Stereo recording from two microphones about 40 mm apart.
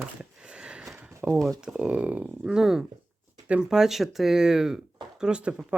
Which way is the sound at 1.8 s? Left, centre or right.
Right.